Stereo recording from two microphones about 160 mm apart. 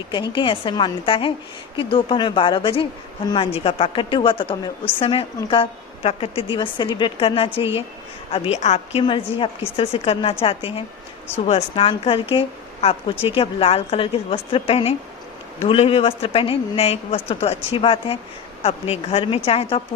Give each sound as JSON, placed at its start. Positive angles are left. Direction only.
{"t": 0.1, "sound": "a woman's voice", "side_deg": 30}